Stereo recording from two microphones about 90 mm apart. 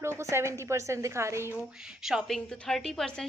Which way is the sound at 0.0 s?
30° right (ahead or behind).